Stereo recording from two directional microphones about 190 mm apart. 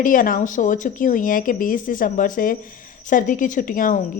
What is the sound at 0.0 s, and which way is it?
A woman's voice, 45° left (ahead or behind).